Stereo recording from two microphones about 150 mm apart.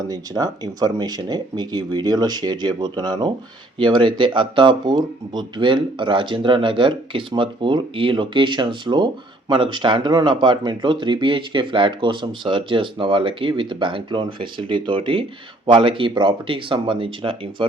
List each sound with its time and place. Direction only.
0.1 s speech: 25° right (ahead or behind)